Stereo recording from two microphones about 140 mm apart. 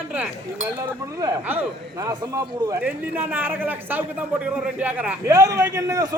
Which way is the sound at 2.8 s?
10° right (ahead or behind).